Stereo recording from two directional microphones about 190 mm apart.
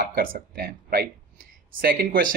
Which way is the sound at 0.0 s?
45° right (ahead or behind).